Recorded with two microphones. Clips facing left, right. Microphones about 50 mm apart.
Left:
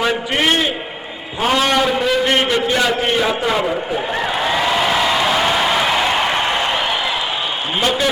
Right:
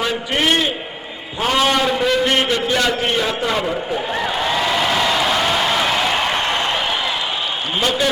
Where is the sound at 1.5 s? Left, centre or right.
Centre.